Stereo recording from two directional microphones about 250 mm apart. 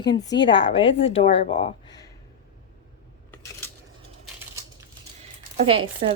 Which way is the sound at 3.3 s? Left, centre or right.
Centre.